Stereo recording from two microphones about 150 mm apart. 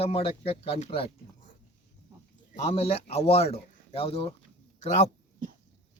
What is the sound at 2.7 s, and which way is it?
Speech, 40° left (ahead or behind).